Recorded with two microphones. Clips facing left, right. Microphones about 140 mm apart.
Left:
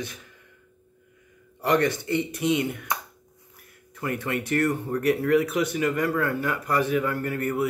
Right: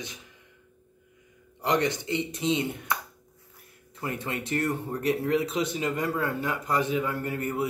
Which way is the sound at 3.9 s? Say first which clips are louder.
Left 4 dB; 25° right (ahead or behind).